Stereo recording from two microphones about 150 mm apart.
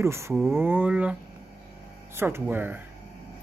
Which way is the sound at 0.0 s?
20° right (ahead or behind).